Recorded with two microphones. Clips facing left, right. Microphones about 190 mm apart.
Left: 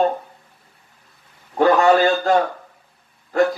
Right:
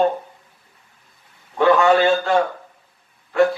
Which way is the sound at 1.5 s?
40° left (ahead or behind).